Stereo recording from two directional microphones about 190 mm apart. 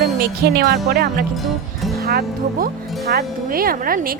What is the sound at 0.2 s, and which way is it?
Speech, 55° right (ahead or behind).